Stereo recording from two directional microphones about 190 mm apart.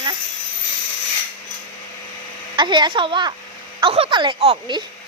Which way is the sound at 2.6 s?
25° right (ahead or behind).